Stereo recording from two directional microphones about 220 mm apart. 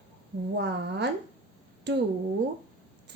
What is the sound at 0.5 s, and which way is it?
A woman's voice, 50° right (ahead or behind).